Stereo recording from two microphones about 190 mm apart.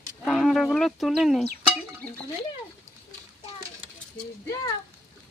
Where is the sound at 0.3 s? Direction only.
Centre (ahead or behind).